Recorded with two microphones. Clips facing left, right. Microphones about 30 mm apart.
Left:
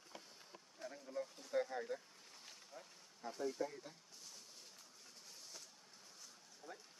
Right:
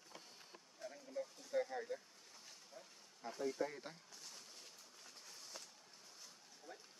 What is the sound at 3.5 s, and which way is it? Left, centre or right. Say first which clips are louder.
Speech: right 1 dB; right.